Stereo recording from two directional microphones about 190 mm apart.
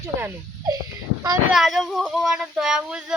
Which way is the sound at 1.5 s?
Centre (ahead or behind).